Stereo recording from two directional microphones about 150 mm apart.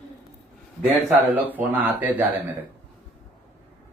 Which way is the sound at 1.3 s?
10° right (ahead or behind).